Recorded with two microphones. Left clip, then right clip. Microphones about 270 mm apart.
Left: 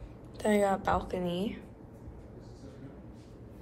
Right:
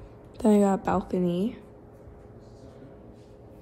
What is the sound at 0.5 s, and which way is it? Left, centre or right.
A woman's voice, right.